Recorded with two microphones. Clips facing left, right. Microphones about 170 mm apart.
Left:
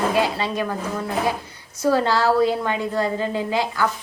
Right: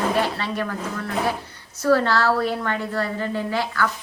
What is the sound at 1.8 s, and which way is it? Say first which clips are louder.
A woman's voice: even; 15° left (ahead or behind).